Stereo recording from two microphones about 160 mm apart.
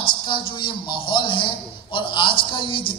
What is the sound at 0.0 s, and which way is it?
A man's voice, 30° left (ahead or behind).